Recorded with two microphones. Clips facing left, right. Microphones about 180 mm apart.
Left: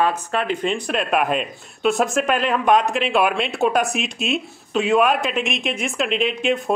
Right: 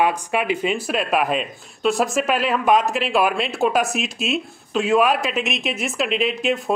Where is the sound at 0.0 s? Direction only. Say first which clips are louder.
Right 1 dB; 10° right (ahead or behind).